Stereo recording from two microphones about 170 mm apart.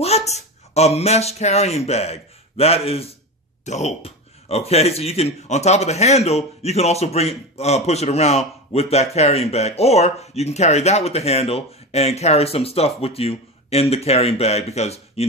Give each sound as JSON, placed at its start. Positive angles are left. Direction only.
{"t": 0.0, "sound": "a man's voice", "side_deg": 40}